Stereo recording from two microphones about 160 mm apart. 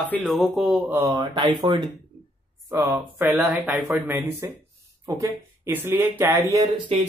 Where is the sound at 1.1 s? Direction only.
25° right (ahead or behind).